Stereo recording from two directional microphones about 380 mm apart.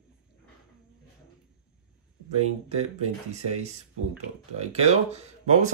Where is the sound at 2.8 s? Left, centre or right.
Centre.